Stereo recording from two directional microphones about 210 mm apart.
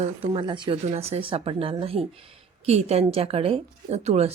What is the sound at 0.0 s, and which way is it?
A woman's voice, 25° right (ahead or behind).